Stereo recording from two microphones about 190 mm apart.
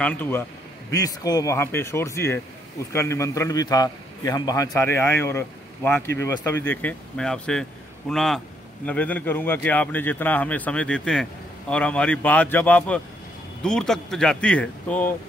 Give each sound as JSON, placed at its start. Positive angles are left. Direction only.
{"t": 0.0, "sound": "a man's voice", "side_deg": 10}